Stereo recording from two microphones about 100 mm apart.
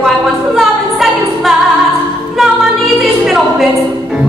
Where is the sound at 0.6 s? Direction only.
Centre (ahead or behind).